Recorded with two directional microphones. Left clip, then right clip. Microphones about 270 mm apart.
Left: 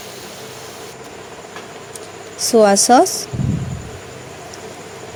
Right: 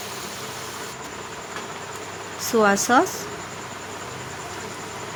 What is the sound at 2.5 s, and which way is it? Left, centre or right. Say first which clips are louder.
Speech: left 8 dB; centre.